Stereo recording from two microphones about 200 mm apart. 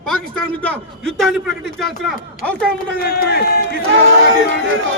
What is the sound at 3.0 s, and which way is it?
Speech, 50° left (ahead or behind).